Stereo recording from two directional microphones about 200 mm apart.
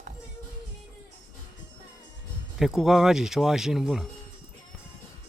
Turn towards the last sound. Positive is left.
turn(degrees=0)  # may be behind; listen again after turning